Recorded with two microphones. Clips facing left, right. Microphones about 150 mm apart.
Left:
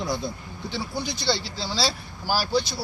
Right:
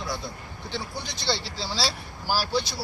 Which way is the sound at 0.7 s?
5° left (ahead or behind).